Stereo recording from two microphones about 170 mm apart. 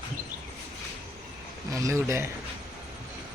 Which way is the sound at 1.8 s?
15° right (ahead or behind).